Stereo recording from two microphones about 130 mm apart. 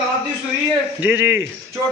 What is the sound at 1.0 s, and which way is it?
Speech, 15° right (ahead or behind).